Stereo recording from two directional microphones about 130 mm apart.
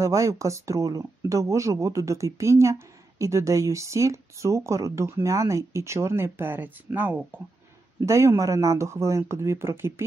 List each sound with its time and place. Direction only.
0.0 s speech: 25° right (ahead or behind)